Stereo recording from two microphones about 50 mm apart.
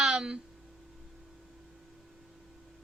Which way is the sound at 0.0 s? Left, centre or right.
Centre.